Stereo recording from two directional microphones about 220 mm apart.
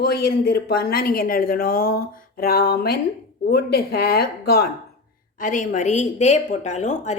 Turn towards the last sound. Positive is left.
turn(degrees=30)  # may be behind; listen again after turning